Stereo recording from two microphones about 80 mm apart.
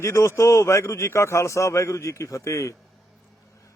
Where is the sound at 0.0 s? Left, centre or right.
Left.